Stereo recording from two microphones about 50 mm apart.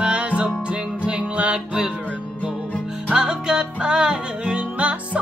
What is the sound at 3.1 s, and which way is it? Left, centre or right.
Music, centre.